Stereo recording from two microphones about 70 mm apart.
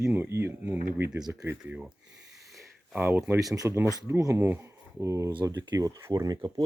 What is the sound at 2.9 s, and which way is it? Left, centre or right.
Speech, right.